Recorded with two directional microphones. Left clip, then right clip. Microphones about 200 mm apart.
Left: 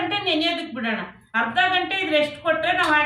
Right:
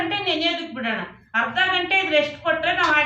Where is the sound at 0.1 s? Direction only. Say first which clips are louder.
Even; centre (ahead or behind).